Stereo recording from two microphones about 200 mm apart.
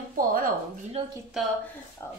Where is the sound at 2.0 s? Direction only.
10° left (ahead or behind).